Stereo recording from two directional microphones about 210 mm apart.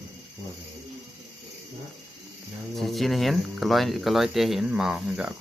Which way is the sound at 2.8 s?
Centre (ahead or behind).